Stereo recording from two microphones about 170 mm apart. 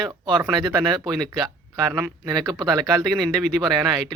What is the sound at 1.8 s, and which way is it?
Speech, 10° right (ahead or behind).